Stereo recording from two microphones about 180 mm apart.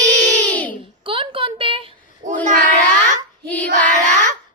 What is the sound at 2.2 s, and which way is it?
Child singing, 90° right.